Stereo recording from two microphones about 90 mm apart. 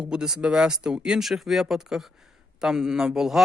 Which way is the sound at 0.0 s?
5° right (ahead or behind).